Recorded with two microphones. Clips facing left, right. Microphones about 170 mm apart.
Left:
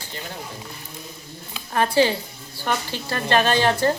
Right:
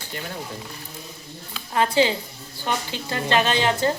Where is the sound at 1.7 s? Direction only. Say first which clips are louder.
Left 1 dB; 20° right (ahead or behind).